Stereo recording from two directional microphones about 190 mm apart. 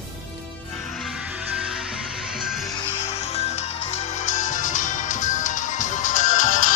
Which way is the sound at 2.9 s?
35° left (ahead or behind).